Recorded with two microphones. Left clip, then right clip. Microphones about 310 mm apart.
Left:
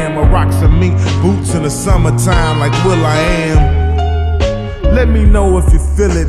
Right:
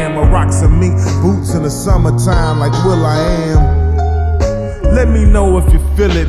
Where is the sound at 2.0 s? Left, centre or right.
Left.